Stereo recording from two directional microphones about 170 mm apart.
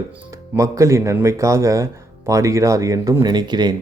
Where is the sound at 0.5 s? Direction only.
15° right (ahead or behind).